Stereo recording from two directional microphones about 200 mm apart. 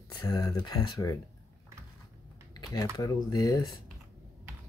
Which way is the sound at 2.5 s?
20° left (ahead or behind).